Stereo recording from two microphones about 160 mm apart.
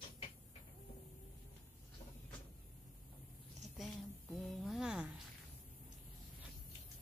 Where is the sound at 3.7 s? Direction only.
Centre (ahead or behind).